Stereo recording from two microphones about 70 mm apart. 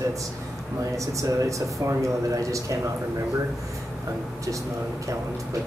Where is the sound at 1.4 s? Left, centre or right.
Right.